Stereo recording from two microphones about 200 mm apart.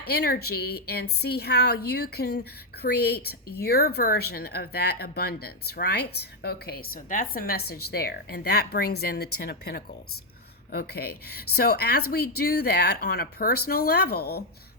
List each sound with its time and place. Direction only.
0.0 s speech: 50° left (ahead or behind)